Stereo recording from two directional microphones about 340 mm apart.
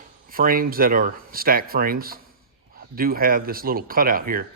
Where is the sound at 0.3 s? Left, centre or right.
Right.